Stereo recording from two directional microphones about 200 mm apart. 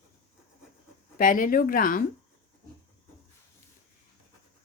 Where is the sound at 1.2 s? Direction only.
45° left (ahead or behind).